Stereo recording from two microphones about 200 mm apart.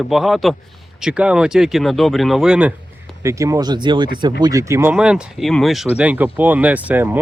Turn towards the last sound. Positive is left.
turn(degrees=-10)  # may be behind; listen again after turning